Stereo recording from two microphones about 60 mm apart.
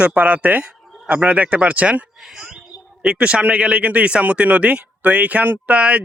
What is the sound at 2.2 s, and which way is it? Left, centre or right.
Speech, centre.